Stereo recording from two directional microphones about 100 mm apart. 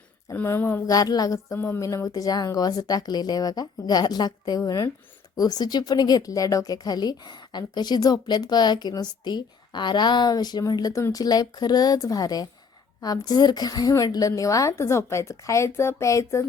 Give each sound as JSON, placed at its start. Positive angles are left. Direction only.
{"t": 0.4, "sound": "speech", "side_deg": 25}
{"t": 0.9, "sound": "speech", "side_deg": 40}
{"t": 1.5, "sound": "speech", "side_deg": 20}
{"t": 1.8, "sound": "speech", "side_deg": 35}